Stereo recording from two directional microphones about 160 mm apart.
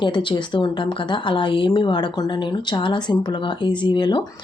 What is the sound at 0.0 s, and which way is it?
A woman's voice, 30° left (ahead or behind).